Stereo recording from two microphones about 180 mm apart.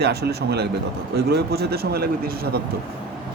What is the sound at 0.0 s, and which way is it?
Speech, 60° right (ahead or behind).